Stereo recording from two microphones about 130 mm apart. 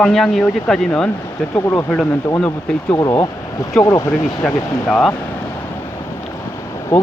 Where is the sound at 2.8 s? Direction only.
25° left (ahead or behind).